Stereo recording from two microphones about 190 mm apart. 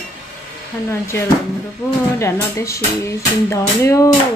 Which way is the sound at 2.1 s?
15° left (ahead or behind).